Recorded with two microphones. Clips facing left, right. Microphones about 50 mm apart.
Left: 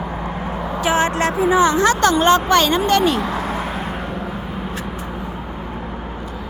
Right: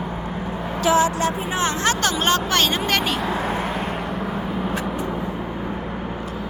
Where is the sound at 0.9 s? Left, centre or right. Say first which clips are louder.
Even; left.